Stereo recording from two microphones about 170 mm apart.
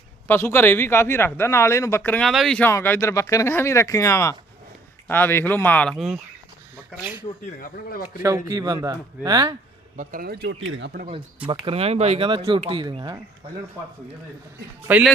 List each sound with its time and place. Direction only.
0.3 s speech: 15° left (ahead or behind)
7.6 s speech: 60° left (ahead or behind)
8.4 s speech: 25° right (ahead or behind)
10.0 s speech: 55° right (ahead or behind); by 11.1 s 75° right (ahead or behind)
11.4 s speech: 35° right (ahead or behind)
14.8 s a man's voice: 10° right (ahead or behind)